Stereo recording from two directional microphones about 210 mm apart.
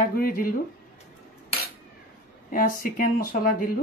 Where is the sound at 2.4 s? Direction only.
40° left (ahead or behind).